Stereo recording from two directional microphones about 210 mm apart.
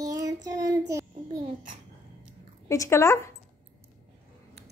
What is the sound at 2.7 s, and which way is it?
Speech, 15° left (ahead or behind).